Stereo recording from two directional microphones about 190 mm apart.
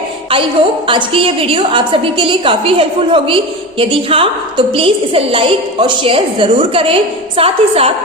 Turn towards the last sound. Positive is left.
turn(degrees=-30)  # may be behind; listen again after turning